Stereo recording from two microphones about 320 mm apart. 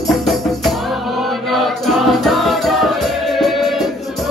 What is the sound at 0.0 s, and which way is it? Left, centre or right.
Music, centre.